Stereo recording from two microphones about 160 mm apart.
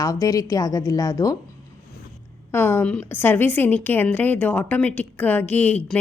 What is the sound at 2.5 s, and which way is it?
A woman's voice, 15° left (ahead or behind).